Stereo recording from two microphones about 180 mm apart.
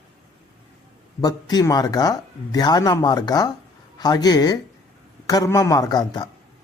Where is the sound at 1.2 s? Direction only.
20° left (ahead or behind).